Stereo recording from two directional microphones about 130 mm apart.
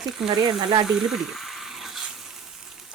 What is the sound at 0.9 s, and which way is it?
Frying, 5° right (ahead or behind).